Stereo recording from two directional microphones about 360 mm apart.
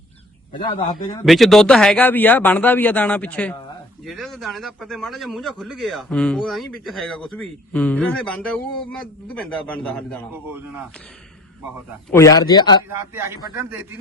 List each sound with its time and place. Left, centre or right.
0.5 s a man's voice: centre
1.2 s a man's voice: centre
12.1 s a man's voice: centre
12.9 s a man's voice: centre